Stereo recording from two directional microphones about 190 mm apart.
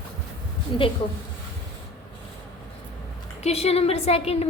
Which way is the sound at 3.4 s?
35° left (ahead or behind).